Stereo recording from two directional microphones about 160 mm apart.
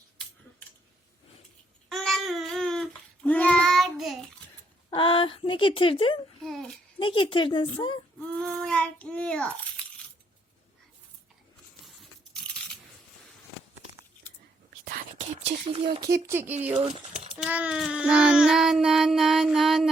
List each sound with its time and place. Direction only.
1.9 s a sound: centre (ahead or behind)
3.2 s child singing: 5° left (ahead or behind)
4.9 s speech: 35° left (ahead or behind)
6.4 s child singing: 5° left (ahead or behind)
7.0 s a woman's voice: 35° left (ahead or behind)
8.2 s child singing: 10° left (ahead or behind)
11.9 s a sound: 5° left (ahead or behind)
14.8 s whispering: 70° right (ahead or behind)
15.6 s speech: 35° right (ahead or behind)
16.1 s speech: 15° right (ahead or behind)
16.7 s speech: 40° right (ahead or behind)
17.2 s child singing: 5° right (ahead or behind)